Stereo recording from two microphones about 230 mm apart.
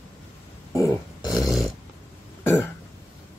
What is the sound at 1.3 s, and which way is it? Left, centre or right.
Dog, centre.